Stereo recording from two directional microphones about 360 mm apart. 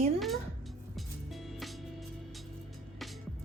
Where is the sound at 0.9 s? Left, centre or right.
Centre.